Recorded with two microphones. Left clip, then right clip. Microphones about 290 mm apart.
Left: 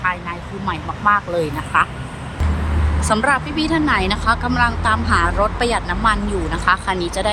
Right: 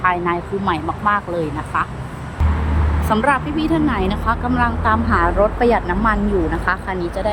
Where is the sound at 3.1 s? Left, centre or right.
Centre.